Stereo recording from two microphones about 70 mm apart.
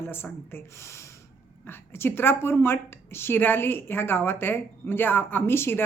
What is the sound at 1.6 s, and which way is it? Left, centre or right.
A woman's voice, left.